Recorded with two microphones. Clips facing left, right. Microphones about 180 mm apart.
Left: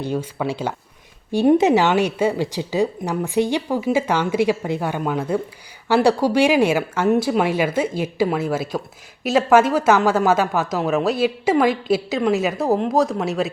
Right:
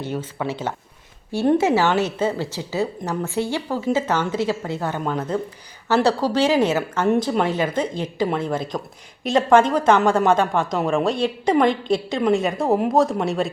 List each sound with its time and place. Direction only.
0.0 s speech: 15° left (ahead or behind)